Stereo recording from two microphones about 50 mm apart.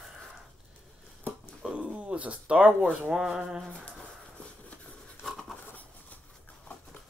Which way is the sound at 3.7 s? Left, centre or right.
Centre.